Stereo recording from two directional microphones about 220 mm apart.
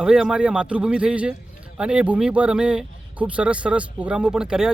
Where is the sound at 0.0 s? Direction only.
5° right (ahead or behind).